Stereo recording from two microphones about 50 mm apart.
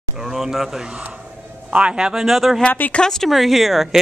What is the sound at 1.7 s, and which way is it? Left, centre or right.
Speech, right.